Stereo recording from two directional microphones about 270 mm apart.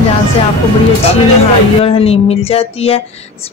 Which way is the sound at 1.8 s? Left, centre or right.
Left.